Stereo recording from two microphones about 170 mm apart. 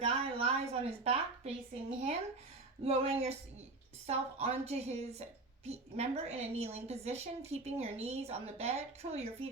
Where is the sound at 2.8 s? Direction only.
35° right (ahead or behind).